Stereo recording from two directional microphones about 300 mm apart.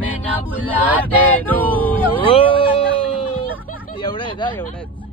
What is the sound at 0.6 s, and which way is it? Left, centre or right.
Speech, centre.